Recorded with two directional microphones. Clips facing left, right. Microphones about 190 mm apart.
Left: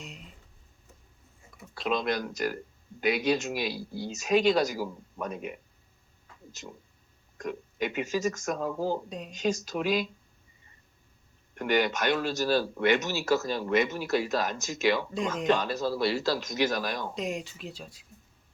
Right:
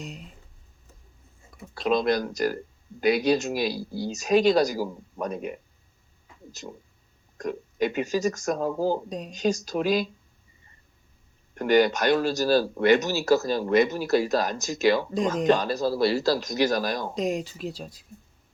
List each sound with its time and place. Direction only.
1.7 s speech: 40° right (ahead or behind)
11.5 s speech: 35° right (ahead or behind)